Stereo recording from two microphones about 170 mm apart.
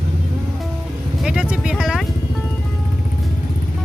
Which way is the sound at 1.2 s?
5° right (ahead or behind).